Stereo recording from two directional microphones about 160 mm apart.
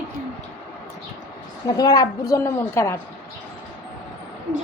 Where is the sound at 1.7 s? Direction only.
25° left (ahead or behind).